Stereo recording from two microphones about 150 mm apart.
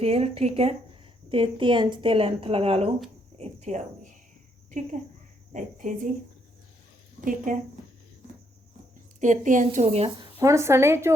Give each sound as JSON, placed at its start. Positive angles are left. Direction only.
{"t": 0.0, "sound": "speech", "side_deg": -40}
{"t": 5.5, "sound": "a woman's voice", "side_deg": -60}
{"t": 7.3, "sound": "a woman's voice", "side_deg": -60}
{"t": 9.2, "sound": "a woman's voice", "side_deg": -55}
{"t": 9.8, "sound": "speech", "side_deg": -40}
{"t": 10.3, "sound": "speech", "side_deg": -20}